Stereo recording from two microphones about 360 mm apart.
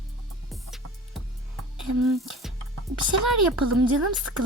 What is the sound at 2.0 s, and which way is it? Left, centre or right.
Music, centre.